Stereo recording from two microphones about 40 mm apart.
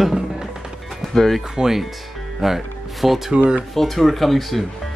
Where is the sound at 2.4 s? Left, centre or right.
Centre.